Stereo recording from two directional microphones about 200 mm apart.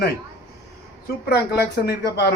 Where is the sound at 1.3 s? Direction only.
55° left (ahead or behind).